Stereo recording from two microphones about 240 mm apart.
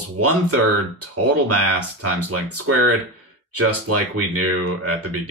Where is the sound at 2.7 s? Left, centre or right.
Right.